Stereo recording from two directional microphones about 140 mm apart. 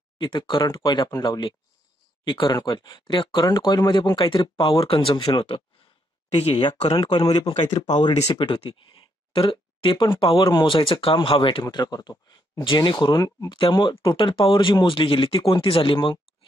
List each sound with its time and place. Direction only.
0.2 s speech: 35° left (ahead or behind)